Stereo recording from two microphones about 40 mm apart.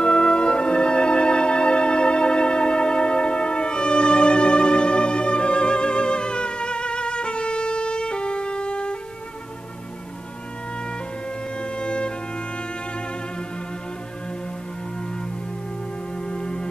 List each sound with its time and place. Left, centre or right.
0.0 s music: left
11.5 s music: left
16.2 s music: left